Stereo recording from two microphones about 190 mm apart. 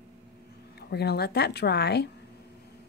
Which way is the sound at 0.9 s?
60° left (ahead or behind).